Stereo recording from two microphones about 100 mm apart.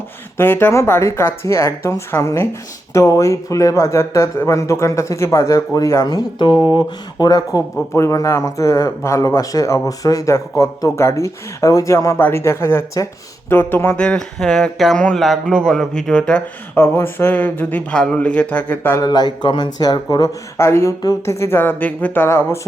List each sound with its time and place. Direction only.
0.3 s speech: 25° left (ahead or behind); by 7.6 s 40° left (ahead or behind)
7.9 s speech: 30° left (ahead or behind)
14.0 s speech: 10° left (ahead or behind)
16.7 s speech: 25° left (ahead or behind)
19.0 s speech: 45° left (ahead or behind)
20.6 s speech: 30° left (ahead or behind)